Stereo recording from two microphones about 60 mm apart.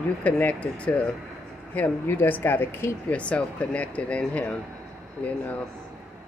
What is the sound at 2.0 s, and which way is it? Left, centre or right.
Speech, left.